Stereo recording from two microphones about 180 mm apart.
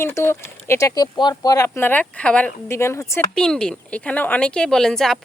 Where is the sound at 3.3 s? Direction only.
5° left (ahead or behind).